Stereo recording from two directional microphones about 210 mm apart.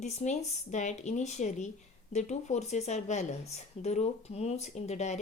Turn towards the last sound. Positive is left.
turn(degrees=30)  # may be behind; listen again after turning